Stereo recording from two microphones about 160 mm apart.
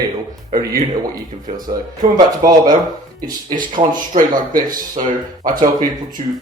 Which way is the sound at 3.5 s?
55° right (ahead or behind).